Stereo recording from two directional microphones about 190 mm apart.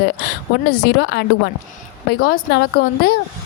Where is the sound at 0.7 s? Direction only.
60° left (ahead or behind).